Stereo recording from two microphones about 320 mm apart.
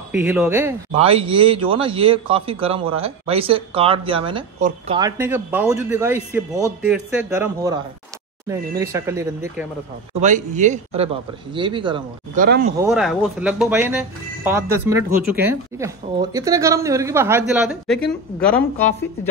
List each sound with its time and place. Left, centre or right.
0.1 s speech: centre
10.2 s a man's voice: right
12.4 s a man's voice: right
12.8 s speech: centre